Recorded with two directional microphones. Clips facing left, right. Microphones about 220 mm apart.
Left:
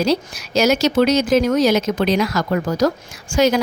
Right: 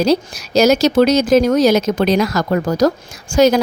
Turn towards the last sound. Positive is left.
turn(degrees=-40)  # may be behind; listen again after turning